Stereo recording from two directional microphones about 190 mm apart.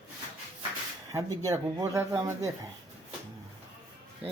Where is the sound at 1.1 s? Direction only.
15° right (ahead or behind).